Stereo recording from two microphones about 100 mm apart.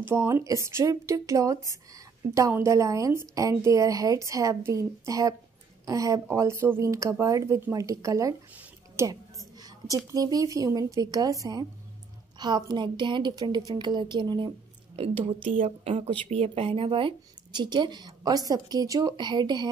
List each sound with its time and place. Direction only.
0.0 s a woman's voice: 25° right (ahead or behind)
8.9 s a sound: 35° right (ahead or behind)
10.1 s a woman's voice: 40° right (ahead or behind)
13.7 s a woman's voice: 50° right (ahead or behind)
15.0 s a woman's voice: 70° right (ahead or behind); by 19.7 s 45° right (ahead or behind)